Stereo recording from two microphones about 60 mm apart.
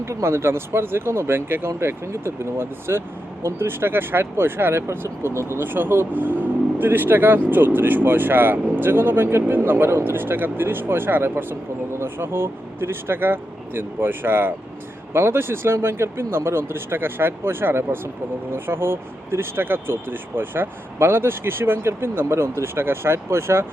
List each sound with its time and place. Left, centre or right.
0.0 s speech: right
4.9 s speech: right